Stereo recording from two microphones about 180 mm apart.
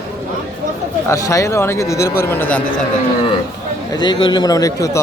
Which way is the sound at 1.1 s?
15° left (ahead or behind).